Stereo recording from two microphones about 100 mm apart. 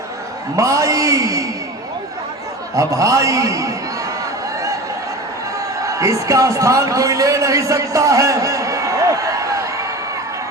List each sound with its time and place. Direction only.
0.5 s a man's voice: 35° right (ahead or behind)
2.7 s a man's voice: 35° right (ahead or behind)
5.8 s a man's voice: 30° right (ahead or behind)